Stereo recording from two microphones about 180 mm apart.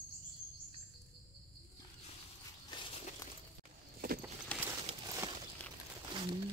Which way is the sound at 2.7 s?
30° left (ahead or behind).